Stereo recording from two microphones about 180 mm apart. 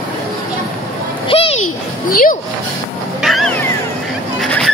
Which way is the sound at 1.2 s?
30° left (ahead or behind).